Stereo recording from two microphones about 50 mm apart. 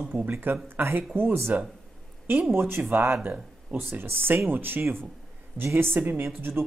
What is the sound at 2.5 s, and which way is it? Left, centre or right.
Speech, right.